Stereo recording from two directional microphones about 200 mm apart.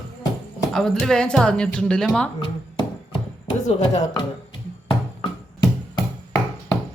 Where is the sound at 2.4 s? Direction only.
25° left (ahead or behind).